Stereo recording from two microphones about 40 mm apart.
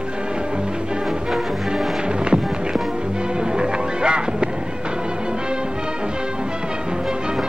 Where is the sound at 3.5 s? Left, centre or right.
Right.